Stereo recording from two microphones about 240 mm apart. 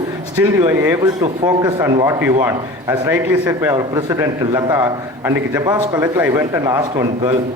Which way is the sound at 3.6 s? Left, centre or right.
Centre.